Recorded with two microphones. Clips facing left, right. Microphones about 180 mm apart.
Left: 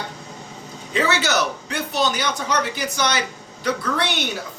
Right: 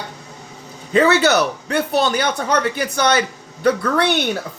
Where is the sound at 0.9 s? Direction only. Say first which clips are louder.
Right 7 dB; 55° right (ahead or behind).